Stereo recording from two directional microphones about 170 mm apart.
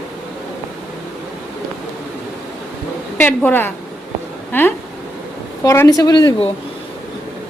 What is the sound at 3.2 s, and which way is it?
A woman's voice, 10° left (ahead or behind).